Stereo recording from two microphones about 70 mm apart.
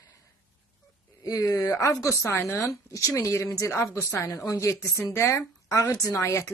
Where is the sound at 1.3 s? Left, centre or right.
Left.